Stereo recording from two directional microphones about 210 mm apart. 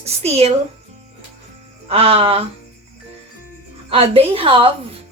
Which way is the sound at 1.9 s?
30° right (ahead or behind).